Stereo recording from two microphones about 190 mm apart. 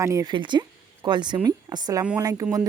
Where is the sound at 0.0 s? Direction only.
15° right (ahead or behind).